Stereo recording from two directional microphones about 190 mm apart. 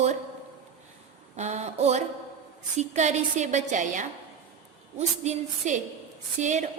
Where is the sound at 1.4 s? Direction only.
35° right (ahead or behind).